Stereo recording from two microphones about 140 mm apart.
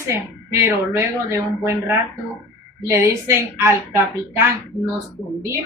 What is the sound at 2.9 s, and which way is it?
Speech, 20° right (ahead or behind).